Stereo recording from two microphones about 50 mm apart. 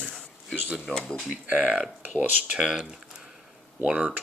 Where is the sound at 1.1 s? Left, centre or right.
Centre.